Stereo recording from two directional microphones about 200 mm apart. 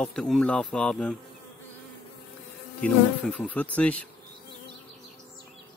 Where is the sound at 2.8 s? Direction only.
Centre (ahead or behind).